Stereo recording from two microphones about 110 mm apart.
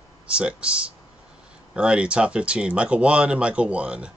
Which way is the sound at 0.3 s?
10° right (ahead or behind).